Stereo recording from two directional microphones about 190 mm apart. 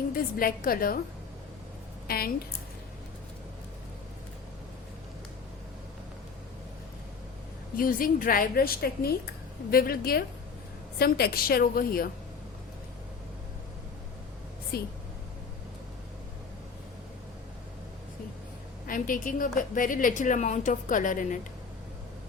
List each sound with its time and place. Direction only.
0.2 s a woman's voice: 50° left (ahead or behind)
2.0 s a woman's voice: 50° left (ahead or behind)
7.8 s a woman's voice: 50° left (ahead or behind)
14.7 s a woman's voice: 55° left (ahead or behind)
18.9 s a woman's voice: 45° left (ahead or behind)